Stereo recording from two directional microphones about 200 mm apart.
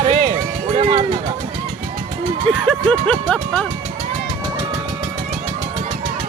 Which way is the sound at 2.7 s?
5° left (ahead or behind).